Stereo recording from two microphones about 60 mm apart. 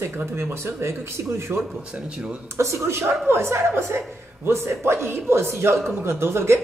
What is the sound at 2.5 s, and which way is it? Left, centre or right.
Speech, right.